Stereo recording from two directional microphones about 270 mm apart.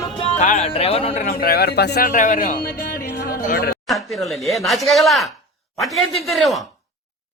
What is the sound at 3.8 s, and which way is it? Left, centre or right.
Speech, centre.